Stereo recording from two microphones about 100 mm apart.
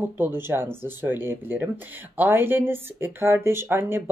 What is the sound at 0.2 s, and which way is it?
Speech, 25° right (ahead or behind).